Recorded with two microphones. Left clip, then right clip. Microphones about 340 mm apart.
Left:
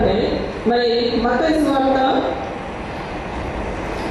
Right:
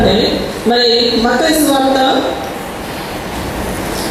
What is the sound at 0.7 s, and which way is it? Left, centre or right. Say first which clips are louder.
A woman's voice: right 6 dB; centre.